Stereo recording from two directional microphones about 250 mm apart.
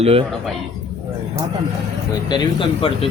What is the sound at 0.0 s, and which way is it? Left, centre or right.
Speech, right.